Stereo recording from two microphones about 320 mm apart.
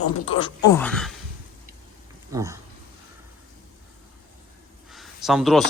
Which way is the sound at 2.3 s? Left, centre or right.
Centre.